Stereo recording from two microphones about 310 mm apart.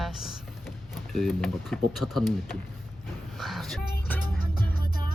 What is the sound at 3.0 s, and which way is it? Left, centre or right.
Dog, centre.